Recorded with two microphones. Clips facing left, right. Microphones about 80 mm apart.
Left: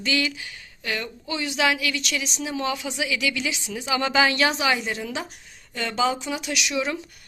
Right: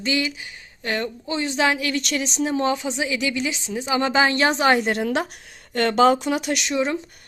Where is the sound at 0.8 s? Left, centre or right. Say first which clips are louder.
Right 4 dB; right.